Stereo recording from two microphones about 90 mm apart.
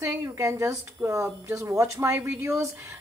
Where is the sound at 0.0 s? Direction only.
35° right (ahead or behind).